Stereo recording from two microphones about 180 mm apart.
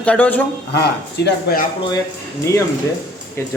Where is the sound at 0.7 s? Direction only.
70° left (ahead or behind).